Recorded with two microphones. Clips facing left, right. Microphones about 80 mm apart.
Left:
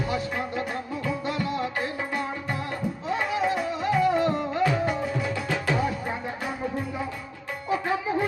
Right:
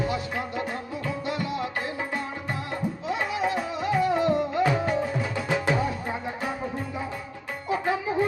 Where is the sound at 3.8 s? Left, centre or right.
Left.